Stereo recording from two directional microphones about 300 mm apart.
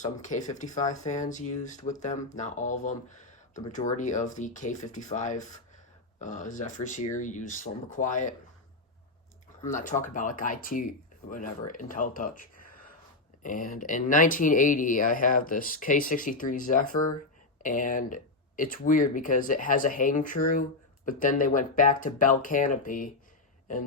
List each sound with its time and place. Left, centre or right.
0.0 s speech: left
9.6 s speech: left